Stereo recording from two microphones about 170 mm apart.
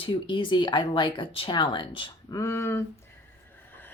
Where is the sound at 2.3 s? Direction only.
15° left (ahead or behind).